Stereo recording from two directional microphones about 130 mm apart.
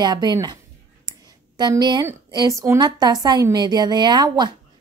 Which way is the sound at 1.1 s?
30° right (ahead or behind).